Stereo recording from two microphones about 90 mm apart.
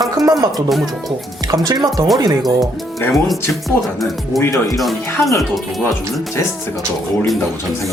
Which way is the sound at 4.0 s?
Centre (ahead or behind).